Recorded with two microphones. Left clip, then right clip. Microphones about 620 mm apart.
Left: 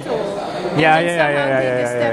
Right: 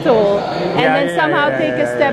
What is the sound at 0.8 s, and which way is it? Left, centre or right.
Speech, left.